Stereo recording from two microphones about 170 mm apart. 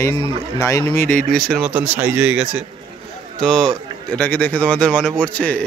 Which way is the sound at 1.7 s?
10° right (ahead or behind).